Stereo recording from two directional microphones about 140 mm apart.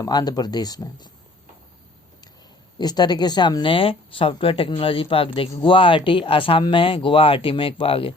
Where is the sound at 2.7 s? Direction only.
30° left (ahead or behind).